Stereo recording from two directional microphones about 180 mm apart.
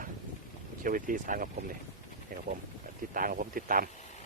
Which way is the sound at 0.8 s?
50° right (ahead or behind).